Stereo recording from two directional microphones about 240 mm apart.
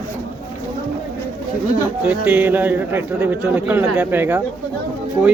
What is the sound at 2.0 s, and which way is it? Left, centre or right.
Speech, centre.